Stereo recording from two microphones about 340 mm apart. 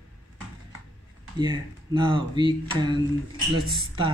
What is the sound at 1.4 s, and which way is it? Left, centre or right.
Speech, centre.